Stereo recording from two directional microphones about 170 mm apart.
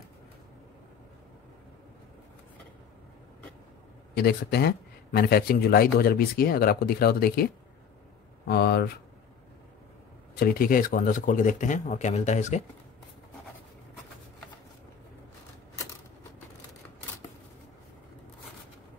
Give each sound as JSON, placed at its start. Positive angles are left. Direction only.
{"t": 4.1, "sound": "speech", "side_deg": 70}
{"t": 8.5, "sound": "speech", "side_deg": 70}
{"t": 10.4, "sound": "speech", "side_deg": 60}